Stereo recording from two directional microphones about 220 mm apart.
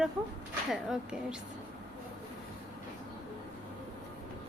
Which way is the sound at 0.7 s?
Centre (ahead or behind).